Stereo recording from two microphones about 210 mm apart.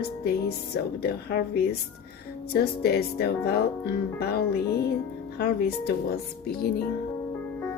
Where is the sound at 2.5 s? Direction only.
50° left (ahead or behind).